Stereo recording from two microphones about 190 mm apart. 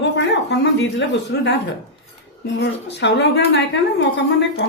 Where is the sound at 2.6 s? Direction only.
65° left (ahead or behind).